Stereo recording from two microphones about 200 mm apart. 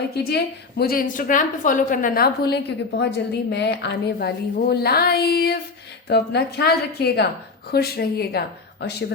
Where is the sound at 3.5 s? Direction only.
60° left (ahead or behind).